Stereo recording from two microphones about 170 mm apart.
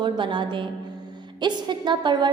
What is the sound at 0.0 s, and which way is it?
A woman's voice, 30° right (ahead or behind).